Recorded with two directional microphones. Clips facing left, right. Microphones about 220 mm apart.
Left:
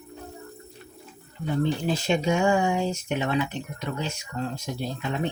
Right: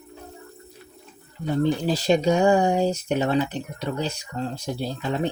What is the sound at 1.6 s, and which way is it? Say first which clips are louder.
Speech: right 5 dB; 35° right (ahead or behind).